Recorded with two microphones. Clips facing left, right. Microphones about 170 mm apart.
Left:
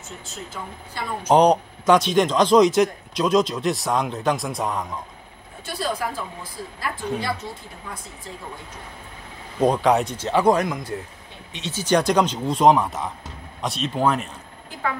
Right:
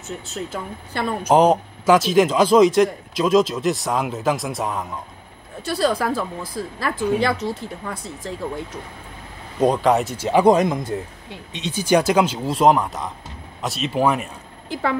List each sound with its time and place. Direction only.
0.5 s speech: 65° right (ahead or behind)
1.3 s speech: centre (ahead or behind)
5.8 s a woman's voice: 90° right
9.6 s speech: centre (ahead or behind)